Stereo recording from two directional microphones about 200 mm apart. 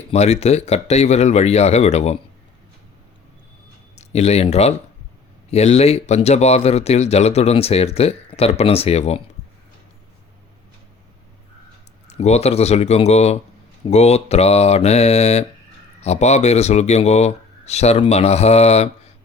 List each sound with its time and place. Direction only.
0.1 s speech: 35° left (ahead or behind)
3.9 s speech: 35° left (ahead or behind)
12.0 s speech: 35° left (ahead or behind)